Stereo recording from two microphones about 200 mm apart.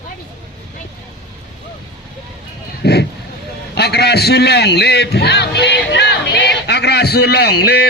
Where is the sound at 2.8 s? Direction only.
55° left (ahead or behind).